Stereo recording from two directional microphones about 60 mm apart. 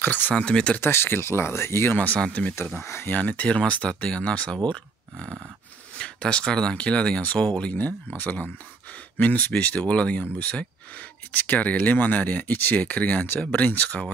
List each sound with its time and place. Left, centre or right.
0.0 s speech: left
0.4 s speech: centre
0.7 s speech: left
2.0 s speech: left
2.8 s speech: left
3.1 s speech: left
5.9 s speech: centre
8.2 s speech: left